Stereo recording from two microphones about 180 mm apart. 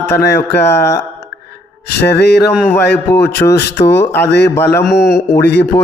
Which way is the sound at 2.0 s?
70° left (ahead or behind).